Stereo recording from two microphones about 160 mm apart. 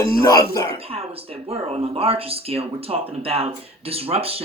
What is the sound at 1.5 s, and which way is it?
Speech, 40° right (ahead or behind).